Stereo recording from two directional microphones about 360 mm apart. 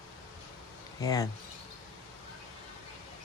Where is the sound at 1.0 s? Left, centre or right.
Centre.